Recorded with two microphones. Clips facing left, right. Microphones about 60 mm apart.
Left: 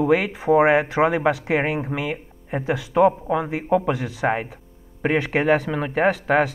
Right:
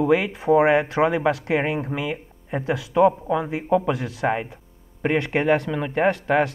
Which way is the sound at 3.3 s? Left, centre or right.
Centre.